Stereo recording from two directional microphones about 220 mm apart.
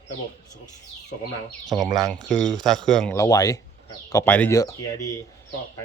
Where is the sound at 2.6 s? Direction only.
Centre (ahead or behind).